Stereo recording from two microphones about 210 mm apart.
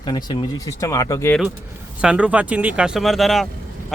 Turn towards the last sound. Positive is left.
turn(degrees=0)  # may be behind; listen again after turning